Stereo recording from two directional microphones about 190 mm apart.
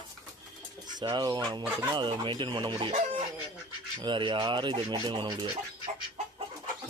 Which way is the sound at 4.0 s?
25° right (ahead or behind).